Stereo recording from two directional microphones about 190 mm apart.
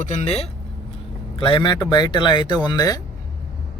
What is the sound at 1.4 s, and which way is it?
Speech, 25° left (ahead or behind).